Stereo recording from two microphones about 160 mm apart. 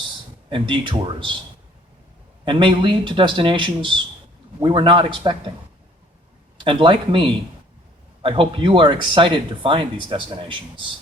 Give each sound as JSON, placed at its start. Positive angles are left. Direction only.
{"t": 0.5, "sound": "speech", "side_deg": -30}
{"t": 2.4, "sound": "speech", "side_deg": -30}
{"t": 6.7, "sound": "speech", "side_deg": -30}